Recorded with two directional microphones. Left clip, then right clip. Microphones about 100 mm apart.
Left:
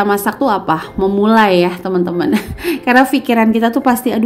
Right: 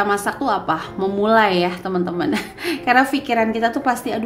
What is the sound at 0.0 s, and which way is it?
A woman's voice, 50° left (ahead or behind).